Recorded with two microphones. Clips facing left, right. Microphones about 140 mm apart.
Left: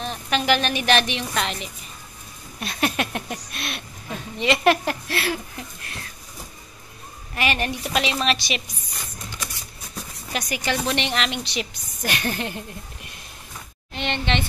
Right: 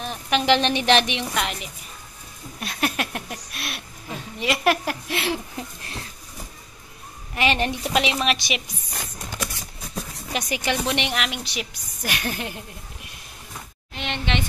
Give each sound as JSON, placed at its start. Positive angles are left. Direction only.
{"t": 0.0, "sound": "a sound", "side_deg": -10}
{"t": 0.5, "sound": "a woman's voice", "side_deg": -25}
{"t": 5.1, "sound": "a woman's voice", "side_deg": -20}
{"t": 7.3, "sound": "a woman's voice", "side_deg": -20}
{"t": 10.3, "sound": "a woman's voice", "side_deg": -20}
{"t": 13.9, "sound": "a woman's voice", "side_deg": -5}